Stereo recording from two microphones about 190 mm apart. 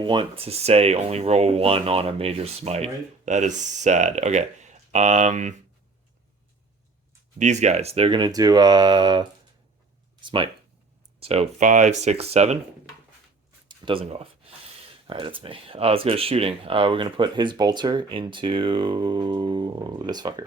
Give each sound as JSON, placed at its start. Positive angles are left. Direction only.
{"t": 0.0, "sound": "speech", "side_deg": -25}
{"t": 7.3, "sound": "speech", "side_deg": -40}
{"t": 13.7, "sound": "speech", "side_deg": -25}